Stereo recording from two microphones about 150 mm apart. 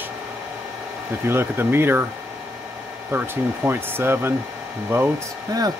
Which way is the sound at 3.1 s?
15° right (ahead or behind).